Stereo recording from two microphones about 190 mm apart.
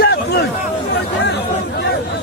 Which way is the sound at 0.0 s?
55° left (ahead or behind).